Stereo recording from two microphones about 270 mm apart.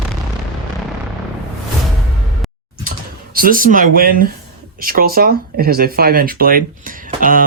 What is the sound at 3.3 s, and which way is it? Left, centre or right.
Speech, right.